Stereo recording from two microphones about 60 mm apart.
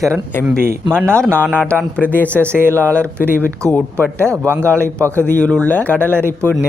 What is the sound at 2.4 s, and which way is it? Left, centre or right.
A man's voice, right.